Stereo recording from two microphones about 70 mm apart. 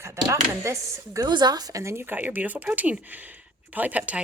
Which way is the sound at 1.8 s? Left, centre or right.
Right.